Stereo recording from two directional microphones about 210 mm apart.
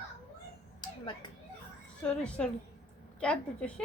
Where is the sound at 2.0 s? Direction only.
5° left (ahead or behind).